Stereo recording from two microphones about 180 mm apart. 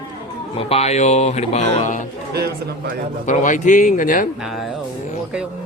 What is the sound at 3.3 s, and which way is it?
Speech, 45° left (ahead or behind).